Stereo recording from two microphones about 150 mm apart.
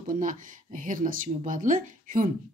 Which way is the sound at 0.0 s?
60° right (ahead or behind).